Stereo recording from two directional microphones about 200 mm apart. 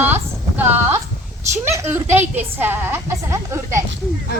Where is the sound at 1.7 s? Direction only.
10° right (ahead or behind).